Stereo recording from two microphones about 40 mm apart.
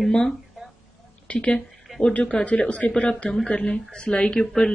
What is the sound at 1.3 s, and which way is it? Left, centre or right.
Speech, left.